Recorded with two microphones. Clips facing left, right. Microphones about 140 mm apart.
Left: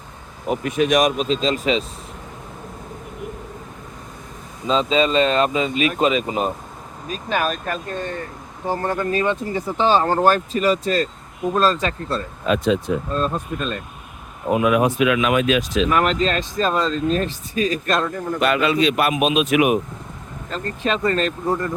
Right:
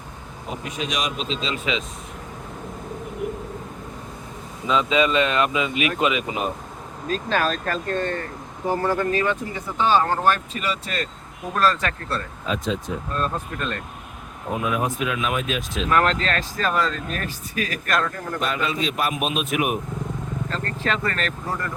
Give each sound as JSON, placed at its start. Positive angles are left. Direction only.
{"t": 0.6, "sound": "speech", "side_deg": 55}
{"t": 4.6, "sound": "speech", "side_deg": 30}
{"t": 7.1, "sound": "speech", "side_deg": 15}
{"t": 8.6, "sound": "speech", "side_deg": 25}
{"t": 11.5, "sound": "speech", "side_deg": 20}
{"t": 12.5, "sound": "speech", "side_deg": 70}
{"t": 13.1, "sound": "speech", "side_deg": 20}
{"t": 14.5, "sound": "a man's voice", "side_deg": 80}
{"t": 15.9, "sound": "speech", "side_deg": 10}
{"t": 18.3, "sound": "a man's voice", "side_deg": 75}
{"t": 20.5, "sound": "speech", "side_deg": 15}